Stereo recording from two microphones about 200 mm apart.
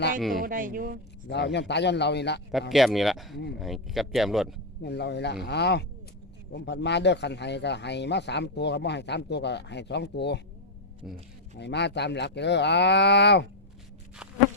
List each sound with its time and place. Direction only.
0.2 s speech: centre (ahead or behind)
0.4 s speech: 45° right (ahead or behind)
1.3 s a man's voice: 60° left (ahead or behind)
2.5 s speech: centre (ahead or behind)
4.8 s a man's voice: 55° left (ahead or behind)
11.1 s speech: centre (ahead or behind)
11.5 s a man's voice: 60° left (ahead or behind)